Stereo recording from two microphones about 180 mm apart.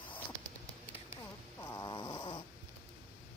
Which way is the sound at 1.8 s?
25° left (ahead or behind).